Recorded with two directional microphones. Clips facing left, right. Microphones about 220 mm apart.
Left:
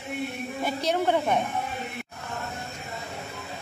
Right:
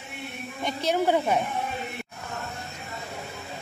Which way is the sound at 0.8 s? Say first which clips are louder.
Right 2 dB; 10° right (ahead or behind).